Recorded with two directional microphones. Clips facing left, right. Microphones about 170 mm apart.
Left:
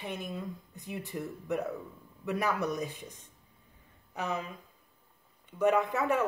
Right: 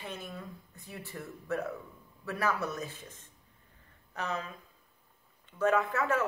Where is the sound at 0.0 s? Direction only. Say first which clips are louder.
Left 4 dB; 15° left (ahead or behind).